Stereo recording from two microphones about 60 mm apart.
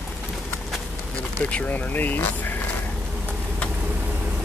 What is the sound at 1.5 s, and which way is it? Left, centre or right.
Speech, left.